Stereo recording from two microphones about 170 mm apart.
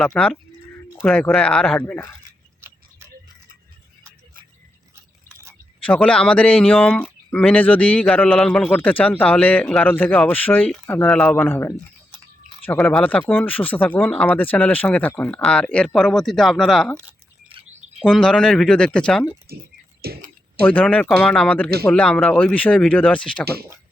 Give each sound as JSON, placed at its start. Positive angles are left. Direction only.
{"t": 0.0, "sound": "speech", "side_deg": 5}
{"t": 2.6, "sound": "a sound", "side_deg": -15}
{"t": 5.8, "sound": "speech", "side_deg": 10}
{"t": 12.8, "sound": "speech", "side_deg": 10}
{"t": 17.5, "sound": "chirp", "side_deg": -40}
{"t": 18.0, "sound": "speech", "side_deg": 5}
{"t": 19.5, "sound": "speech", "side_deg": -65}
{"t": 20.6, "sound": "speech", "side_deg": 10}